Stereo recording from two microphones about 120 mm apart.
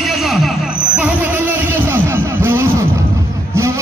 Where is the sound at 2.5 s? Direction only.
25° right (ahead or behind).